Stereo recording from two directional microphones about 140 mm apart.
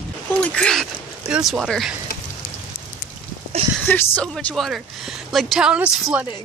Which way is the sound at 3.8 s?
10° left (ahead or behind).